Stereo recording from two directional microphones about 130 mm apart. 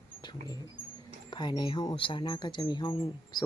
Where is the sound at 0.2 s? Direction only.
30° left (ahead or behind).